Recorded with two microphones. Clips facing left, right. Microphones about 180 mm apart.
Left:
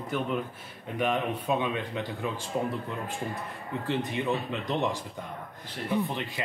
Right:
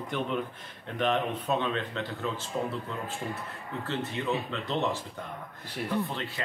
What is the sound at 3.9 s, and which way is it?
Speech, 15° left (ahead or behind).